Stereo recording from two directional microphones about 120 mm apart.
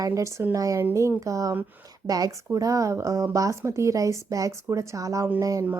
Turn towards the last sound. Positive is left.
turn(degrees=-30)  # may be behind; listen again after turning